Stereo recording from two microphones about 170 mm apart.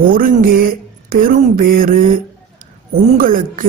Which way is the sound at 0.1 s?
55° right (ahead or behind).